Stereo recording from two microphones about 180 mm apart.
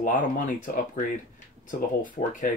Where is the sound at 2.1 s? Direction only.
45° left (ahead or behind).